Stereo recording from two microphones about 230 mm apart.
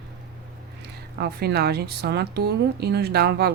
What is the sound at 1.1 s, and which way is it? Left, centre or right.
Speech, right.